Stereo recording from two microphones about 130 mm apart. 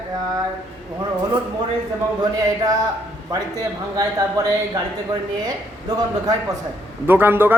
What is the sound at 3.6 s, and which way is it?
Speech, 25° right (ahead or behind).